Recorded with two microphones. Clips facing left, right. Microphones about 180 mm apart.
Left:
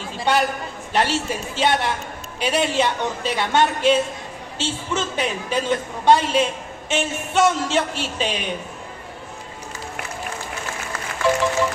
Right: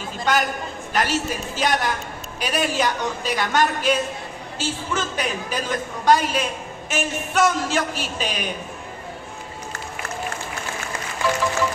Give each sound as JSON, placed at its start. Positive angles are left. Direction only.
{"t": 0.2, "sound": "a woman's voice", "side_deg": 30}